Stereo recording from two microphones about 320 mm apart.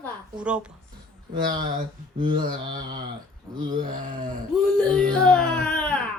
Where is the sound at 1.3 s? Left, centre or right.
Centre.